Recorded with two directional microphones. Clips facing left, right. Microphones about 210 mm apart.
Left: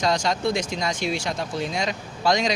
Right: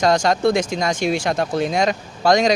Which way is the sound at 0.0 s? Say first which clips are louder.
Right 6 dB; 50° right (ahead or behind).